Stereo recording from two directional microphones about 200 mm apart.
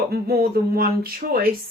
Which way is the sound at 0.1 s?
50° right (ahead or behind).